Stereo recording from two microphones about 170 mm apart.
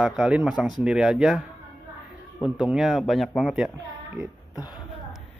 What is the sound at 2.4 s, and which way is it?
A man's voice, 5° right (ahead or behind).